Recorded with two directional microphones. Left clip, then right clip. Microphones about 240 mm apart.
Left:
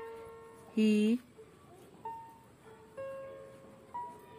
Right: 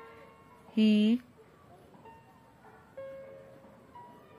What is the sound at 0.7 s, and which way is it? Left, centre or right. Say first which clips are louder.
Speech: right 2 dB; centre.